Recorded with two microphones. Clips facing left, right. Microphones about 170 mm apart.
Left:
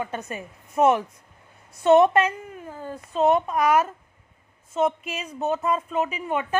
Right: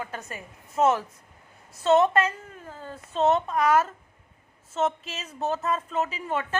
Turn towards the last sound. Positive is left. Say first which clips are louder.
# left 3 dB
turn(degrees=15)  # may be behind; listen again after turning